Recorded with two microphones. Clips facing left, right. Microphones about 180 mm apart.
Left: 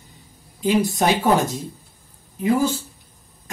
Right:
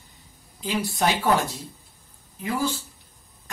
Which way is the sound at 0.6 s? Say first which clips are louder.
Left 7 dB; 20° left (ahead or behind).